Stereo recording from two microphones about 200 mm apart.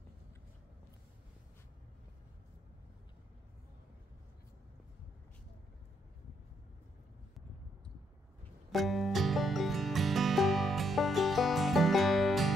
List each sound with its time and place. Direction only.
8.7 s music: centre (ahead or behind)